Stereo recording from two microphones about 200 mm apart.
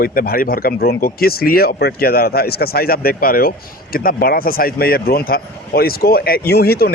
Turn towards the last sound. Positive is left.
turn(degrees=50)  # may be behind; listen again after turning